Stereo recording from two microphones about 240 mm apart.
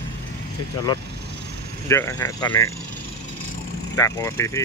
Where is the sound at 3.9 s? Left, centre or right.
Centre.